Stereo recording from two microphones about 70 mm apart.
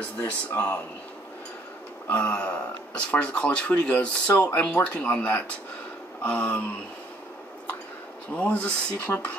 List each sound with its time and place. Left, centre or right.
0.2 s speech: left
2.0 s speech: left
8.4 s speech: centre